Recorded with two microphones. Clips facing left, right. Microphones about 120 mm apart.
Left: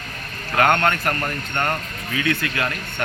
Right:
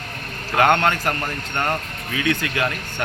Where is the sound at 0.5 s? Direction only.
20° right (ahead or behind).